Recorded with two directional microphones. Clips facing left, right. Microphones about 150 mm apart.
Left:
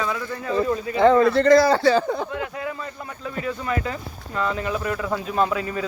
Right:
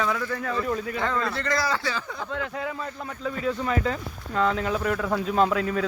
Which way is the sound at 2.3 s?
15° left (ahead or behind).